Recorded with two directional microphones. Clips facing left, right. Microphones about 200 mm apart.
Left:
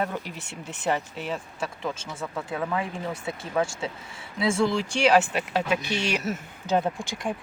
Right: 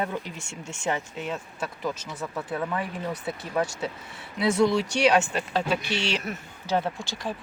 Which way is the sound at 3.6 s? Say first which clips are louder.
Even; 25° left (ahead or behind).